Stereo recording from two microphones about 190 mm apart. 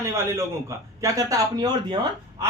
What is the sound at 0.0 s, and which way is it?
Speech, 15° right (ahead or behind).